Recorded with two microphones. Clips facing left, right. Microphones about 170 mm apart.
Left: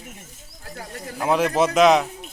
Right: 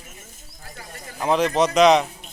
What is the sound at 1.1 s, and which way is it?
A man's voice, 5° left (ahead or behind).